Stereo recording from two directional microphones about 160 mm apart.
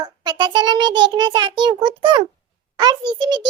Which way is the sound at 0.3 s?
25° right (ahead or behind).